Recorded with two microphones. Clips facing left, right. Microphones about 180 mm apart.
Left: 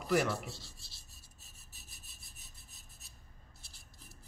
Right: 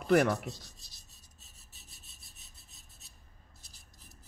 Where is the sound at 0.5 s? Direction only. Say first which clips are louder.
Right 5 dB; 20° right (ahead or behind).